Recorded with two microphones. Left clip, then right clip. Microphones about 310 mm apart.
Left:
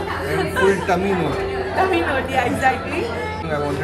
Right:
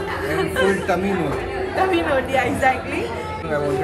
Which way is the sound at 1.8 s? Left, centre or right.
Centre.